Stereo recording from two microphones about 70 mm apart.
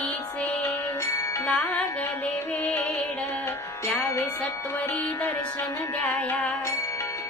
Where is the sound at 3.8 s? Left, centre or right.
Left.